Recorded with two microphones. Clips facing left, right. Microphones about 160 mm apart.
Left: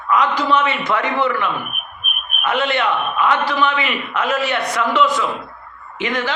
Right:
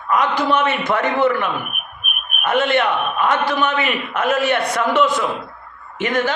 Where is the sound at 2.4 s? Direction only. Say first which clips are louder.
Right 2 dB; 50° right (ahead or behind).